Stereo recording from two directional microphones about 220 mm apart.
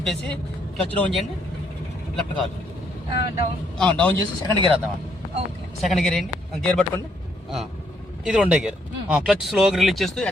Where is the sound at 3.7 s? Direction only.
5° left (ahead or behind).